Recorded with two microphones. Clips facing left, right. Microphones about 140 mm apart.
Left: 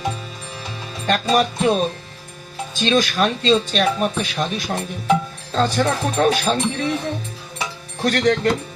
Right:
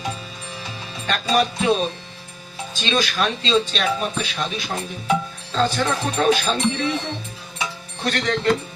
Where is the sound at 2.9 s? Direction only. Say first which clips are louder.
Left 4 dB; 50° left (ahead or behind).